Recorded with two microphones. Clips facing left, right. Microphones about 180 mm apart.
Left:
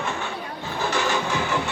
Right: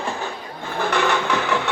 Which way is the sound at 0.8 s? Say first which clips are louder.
Right 4 dB; 60° right (ahead or behind).